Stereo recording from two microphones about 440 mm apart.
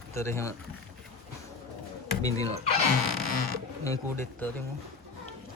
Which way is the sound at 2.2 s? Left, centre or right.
Centre.